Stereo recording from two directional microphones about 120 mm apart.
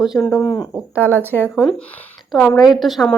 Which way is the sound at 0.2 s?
10° left (ahead or behind).